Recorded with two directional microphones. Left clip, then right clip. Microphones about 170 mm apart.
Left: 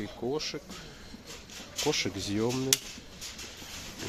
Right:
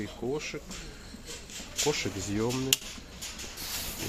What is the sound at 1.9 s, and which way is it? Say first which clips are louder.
Speech: left 1 dB; 30° left (ahead or behind).